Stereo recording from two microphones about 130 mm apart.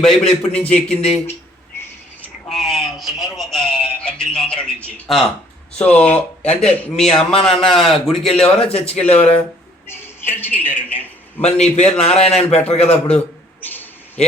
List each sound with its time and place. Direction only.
0.0 s a man's voice: 5° left (ahead or behind)
1.7 s a sound: 20° left (ahead or behind)
2.2 s a sound: 5° left (ahead or behind)
5.7 s speech: 10° left (ahead or behind)
6.4 s speech: 50° left (ahead or behind)
6.9 s speech: 5° left (ahead or behind)
8.5 s speech: 50° left (ahead or behind)
9.8 s a man's voice: 15° left (ahead or behind)
11.4 s a man's voice: 55° left (ahead or behind)
12.9 s a sound: 10° left (ahead or behind)